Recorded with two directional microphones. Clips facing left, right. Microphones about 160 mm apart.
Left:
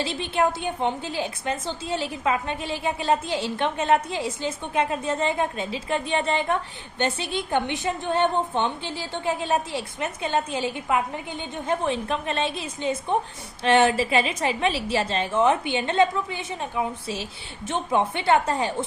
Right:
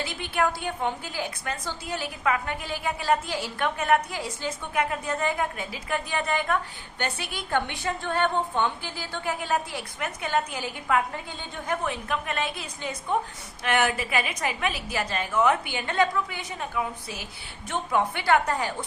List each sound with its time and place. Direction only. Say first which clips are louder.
0.0 s a woman's voice: left 3 dB; 25° left (ahead or behind)